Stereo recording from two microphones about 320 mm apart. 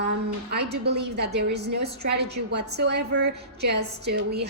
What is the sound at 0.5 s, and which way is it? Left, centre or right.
A woman's voice, right.